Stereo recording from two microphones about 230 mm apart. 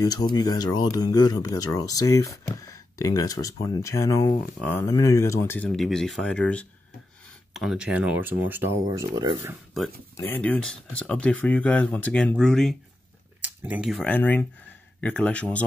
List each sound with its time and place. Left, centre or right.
0.0 s speech: centre
10.1 s speech: centre